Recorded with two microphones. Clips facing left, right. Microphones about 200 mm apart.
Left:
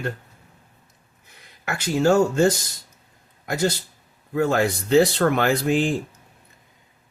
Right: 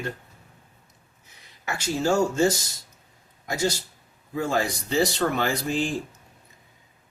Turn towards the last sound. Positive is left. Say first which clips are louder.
# left 6 dB
turn(degrees=60)  # may be behind; listen again after turning